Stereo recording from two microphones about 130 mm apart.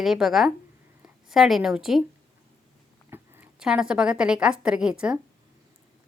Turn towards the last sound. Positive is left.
turn(degrees=-5)  # may be behind; listen again after turning